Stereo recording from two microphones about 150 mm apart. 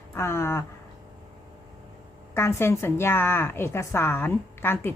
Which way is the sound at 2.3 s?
15° left (ahead or behind).